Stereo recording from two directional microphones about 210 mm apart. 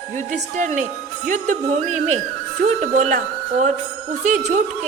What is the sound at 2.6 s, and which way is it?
A woman's voice, 35° right (ahead or behind).